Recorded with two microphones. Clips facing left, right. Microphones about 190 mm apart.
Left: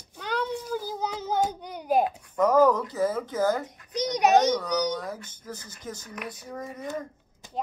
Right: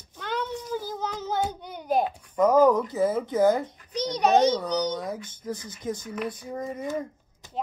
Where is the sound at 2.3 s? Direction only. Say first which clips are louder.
Right 2 dB; 15° right (ahead or behind).